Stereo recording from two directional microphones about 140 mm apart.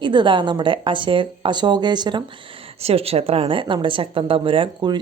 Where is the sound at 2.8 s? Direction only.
45° right (ahead or behind).